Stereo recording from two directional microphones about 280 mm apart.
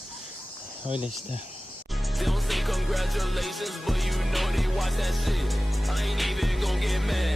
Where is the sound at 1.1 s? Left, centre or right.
Right.